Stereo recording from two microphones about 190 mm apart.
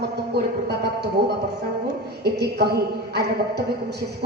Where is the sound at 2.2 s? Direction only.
60° right (ahead or behind).